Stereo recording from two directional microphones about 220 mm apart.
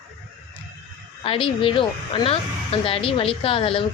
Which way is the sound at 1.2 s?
25° left (ahead or behind).